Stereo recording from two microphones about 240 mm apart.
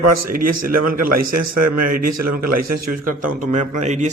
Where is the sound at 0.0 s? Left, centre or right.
Right.